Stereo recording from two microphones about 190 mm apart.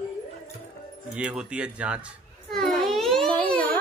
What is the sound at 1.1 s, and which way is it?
Speech, 5° right (ahead or behind).